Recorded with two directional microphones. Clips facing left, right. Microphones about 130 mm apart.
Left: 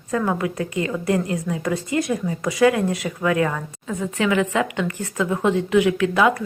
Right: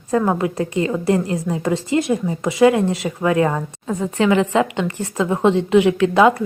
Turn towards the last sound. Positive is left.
turn(degrees=-30)  # may be behind; listen again after turning